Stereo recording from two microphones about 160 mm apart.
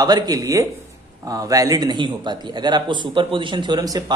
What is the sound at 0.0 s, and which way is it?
Speech, 25° right (ahead or behind).